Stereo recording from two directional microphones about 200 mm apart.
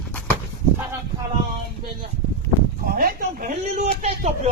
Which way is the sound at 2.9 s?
45° right (ahead or behind).